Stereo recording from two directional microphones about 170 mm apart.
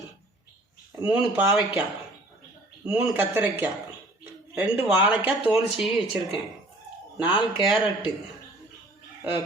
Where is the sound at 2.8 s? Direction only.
10° right (ahead or behind).